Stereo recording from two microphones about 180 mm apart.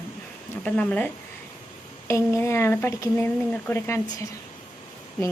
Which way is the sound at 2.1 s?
15° left (ahead or behind).